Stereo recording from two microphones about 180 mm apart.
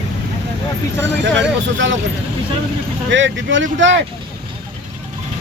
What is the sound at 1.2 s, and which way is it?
Speech, 85° right.